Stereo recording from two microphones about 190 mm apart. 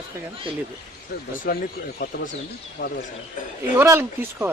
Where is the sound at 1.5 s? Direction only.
45° left (ahead or behind).